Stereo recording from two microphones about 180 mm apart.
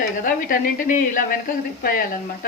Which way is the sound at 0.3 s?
50° left (ahead or behind).